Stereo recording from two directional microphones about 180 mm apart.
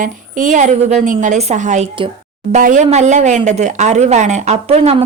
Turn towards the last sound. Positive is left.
turn(degrees=-35)  # may be behind; listen again after turning